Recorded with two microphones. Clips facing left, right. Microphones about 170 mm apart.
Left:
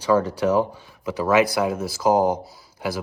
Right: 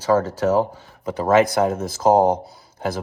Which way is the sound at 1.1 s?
50° right (ahead or behind).